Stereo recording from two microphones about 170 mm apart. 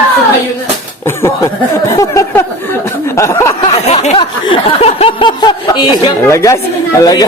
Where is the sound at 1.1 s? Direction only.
15° left (ahead or behind).